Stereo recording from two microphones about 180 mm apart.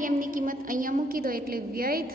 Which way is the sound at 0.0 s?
50° right (ahead or behind).